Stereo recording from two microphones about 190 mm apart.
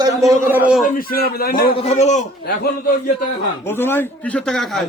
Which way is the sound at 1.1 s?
50° left (ahead or behind).